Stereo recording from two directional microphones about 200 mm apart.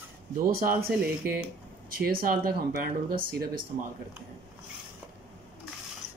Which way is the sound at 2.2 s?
45° right (ahead or behind).